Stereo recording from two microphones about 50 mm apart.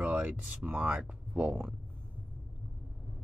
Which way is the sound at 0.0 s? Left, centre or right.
Right.